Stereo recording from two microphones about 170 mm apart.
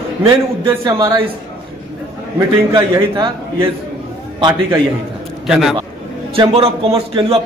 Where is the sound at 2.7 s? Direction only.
25° right (ahead or behind).